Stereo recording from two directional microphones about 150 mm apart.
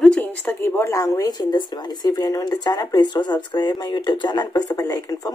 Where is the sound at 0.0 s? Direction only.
10° left (ahead or behind).